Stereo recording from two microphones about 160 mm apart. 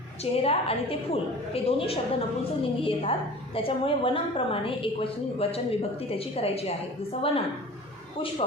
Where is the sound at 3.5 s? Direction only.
35° left (ahead or behind).